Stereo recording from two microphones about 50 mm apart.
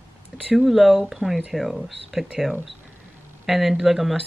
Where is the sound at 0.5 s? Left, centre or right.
Centre.